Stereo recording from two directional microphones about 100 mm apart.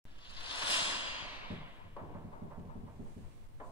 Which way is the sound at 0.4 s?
55° left (ahead or behind).